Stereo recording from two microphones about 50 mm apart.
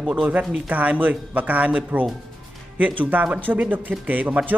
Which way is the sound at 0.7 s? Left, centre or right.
Right.